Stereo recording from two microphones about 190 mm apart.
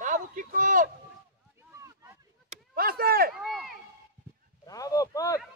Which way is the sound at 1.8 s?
15° right (ahead or behind).